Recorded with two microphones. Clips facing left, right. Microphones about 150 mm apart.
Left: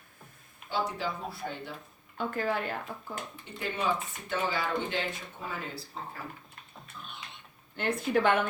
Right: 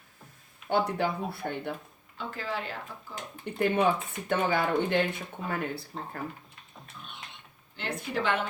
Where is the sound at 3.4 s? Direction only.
55° right (ahead or behind).